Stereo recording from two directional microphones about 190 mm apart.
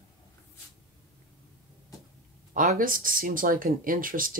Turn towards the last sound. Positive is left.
turn(degrees=-45)  # may be behind; listen again after turning